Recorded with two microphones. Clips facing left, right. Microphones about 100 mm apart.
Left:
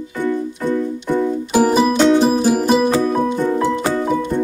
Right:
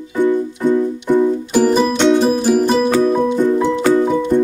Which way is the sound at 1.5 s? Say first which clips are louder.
Left 1 dB; 5° left (ahead or behind).